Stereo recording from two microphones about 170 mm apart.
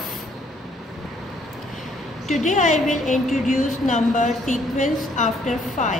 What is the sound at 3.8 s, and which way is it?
A woman's voice, 45° left (ahead or behind).